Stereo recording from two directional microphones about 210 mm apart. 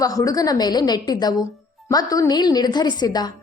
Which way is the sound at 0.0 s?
15° left (ahead or behind).